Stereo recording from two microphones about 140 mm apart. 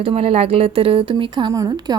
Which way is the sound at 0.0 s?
45° right (ahead or behind).